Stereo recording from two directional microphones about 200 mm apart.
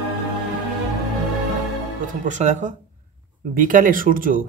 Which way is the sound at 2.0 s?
40° right (ahead or behind).